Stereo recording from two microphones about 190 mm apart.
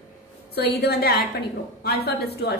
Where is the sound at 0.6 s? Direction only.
55° left (ahead or behind).